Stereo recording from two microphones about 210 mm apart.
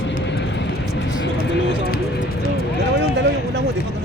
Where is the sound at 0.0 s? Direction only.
60° left (ahead or behind).